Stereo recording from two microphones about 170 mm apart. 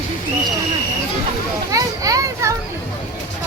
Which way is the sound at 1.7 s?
20° right (ahead or behind).